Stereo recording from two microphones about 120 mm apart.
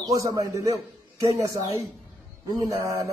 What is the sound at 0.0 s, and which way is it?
Speech, 30° right (ahead or behind).